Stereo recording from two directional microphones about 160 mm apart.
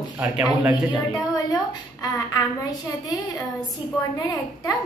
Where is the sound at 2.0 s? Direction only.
25° left (ahead or behind).